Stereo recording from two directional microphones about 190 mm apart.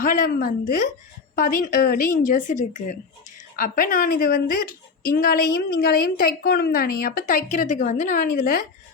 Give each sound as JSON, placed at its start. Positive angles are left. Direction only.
{"t": 0.0, "sound": "a woman's voice", "side_deg": 45}